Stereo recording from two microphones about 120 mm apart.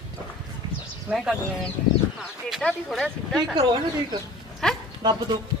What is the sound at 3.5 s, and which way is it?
Speech, 35° right (ahead or behind).